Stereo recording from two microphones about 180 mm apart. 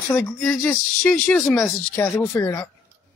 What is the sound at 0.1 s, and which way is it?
Speech, 10° left (ahead or behind).